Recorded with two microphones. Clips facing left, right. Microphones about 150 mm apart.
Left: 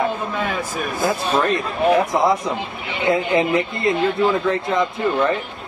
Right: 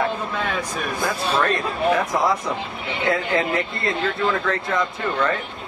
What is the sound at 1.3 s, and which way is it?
Speech, 20° left (ahead or behind).